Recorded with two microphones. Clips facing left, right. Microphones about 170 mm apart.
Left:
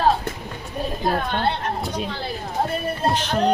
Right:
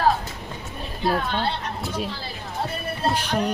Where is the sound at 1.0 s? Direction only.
50° left (ahead or behind).